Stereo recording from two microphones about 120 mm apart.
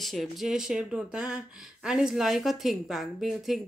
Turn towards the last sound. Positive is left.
turn(degrees=0)  # may be behind; listen again after turning